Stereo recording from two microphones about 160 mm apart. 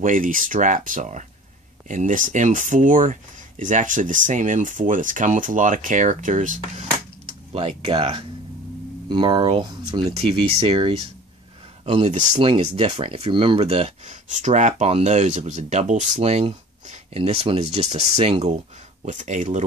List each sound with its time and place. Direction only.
0.0 s speech: 55° right (ahead or behind)
7.5 s speech: 35° right (ahead or behind)